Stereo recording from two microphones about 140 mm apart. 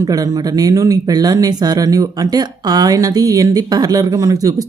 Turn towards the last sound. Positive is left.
turn(degrees=-25)  # may be behind; listen again after turning